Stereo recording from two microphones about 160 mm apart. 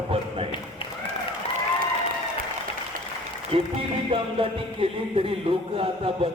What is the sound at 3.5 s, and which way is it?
Music, 35° right (ahead or behind).